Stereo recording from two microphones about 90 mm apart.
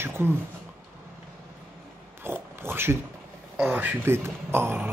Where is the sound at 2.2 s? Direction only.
25° right (ahead or behind).